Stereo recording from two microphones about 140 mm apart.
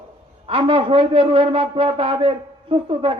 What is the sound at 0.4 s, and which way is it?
A man's voice, 40° right (ahead or behind).